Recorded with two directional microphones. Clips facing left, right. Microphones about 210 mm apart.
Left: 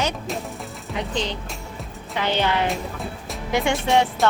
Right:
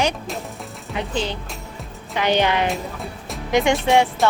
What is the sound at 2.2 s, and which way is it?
A woman's voice, 15° right (ahead or behind).